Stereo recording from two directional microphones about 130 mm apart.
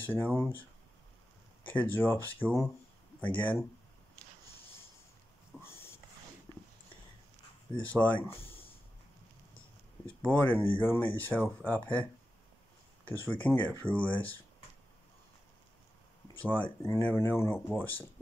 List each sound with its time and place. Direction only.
0.0 s speech: 15° left (ahead or behind)
1.7 s speech: 15° left (ahead or behind)
5.5 s a sound: 5° right (ahead or behind)
7.9 s speech: 15° left (ahead or behind)
10.0 s speech: 15° left (ahead or behind)
13.1 s speech: 15° left (ahead or behind)
16.3 s speech: 15° left (ahead or behind)